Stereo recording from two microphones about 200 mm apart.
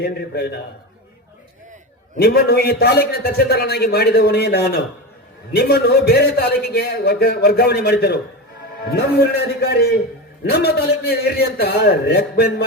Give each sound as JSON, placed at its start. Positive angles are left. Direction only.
{"t": 0.0, "sound": "a man's voice", "side_deg": 55}
{"t": 2.1, "sound": "a man's voice", "side_deg": 50}